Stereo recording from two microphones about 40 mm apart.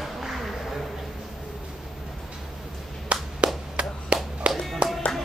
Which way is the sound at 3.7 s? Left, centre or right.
Right.